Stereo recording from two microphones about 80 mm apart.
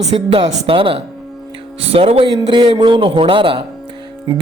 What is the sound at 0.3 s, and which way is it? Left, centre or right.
Speech, right.